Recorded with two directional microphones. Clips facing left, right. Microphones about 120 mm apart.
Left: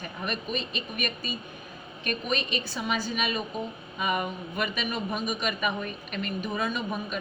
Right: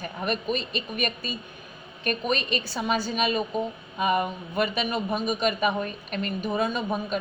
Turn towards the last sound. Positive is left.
turn(degrees=-35)  # may be behind; listen again after turning